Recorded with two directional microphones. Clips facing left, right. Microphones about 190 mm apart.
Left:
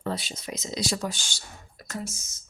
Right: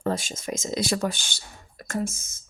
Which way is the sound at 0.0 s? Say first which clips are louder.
Right 4 dB; 45° right (ahead or behind).